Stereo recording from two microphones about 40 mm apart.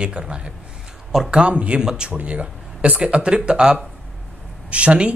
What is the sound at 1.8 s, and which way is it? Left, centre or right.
Speech, centre.